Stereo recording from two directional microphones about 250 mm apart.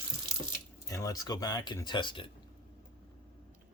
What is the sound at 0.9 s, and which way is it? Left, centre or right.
Speech, centre.